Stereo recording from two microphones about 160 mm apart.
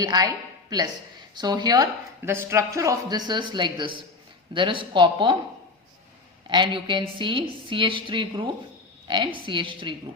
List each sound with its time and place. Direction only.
0.0 s a woman's voice: 25° right (ahead or behind)
6.5 s a woman's voice: 30° right (ahead or behind)